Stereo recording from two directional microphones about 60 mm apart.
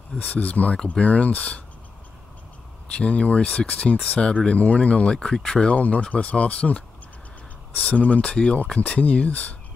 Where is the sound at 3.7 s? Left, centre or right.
Left.